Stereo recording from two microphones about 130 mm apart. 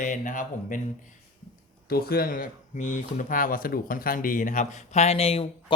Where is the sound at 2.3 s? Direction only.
85° left.